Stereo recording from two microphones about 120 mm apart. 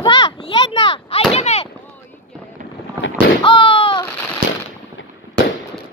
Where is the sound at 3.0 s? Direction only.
20° right (ahead or behind).